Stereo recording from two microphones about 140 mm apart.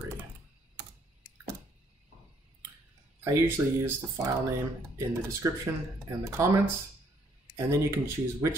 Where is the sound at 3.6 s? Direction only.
20° right (ahead or behind).